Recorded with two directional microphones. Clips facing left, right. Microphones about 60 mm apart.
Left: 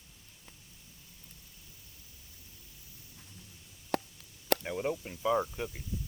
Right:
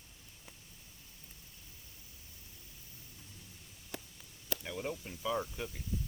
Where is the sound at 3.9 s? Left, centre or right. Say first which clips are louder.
Left 13 dB; left.